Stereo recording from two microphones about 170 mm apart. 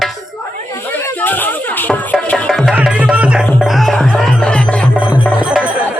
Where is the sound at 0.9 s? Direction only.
10° left (ahead or behind).